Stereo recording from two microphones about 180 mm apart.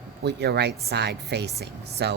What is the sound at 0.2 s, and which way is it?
Speech, 65° right (ahead or behind).